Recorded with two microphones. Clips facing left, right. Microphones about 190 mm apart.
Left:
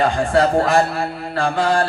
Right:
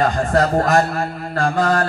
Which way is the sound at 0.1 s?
45° right (ahead or behind).